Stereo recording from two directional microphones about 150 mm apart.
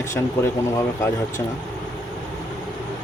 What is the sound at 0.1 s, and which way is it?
Speech, 20° left (ahead or behind).